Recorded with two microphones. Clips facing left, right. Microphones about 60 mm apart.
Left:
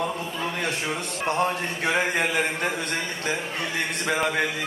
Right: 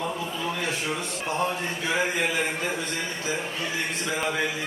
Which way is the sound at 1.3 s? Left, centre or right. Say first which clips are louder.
Left 3 dB; left.